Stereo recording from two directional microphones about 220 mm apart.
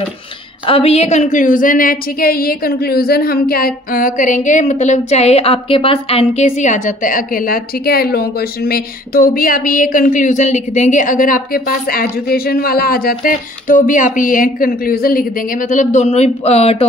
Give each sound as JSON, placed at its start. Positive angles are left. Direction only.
{"t": 0.7, "sound": "a woman's voice", "side_deg": 25}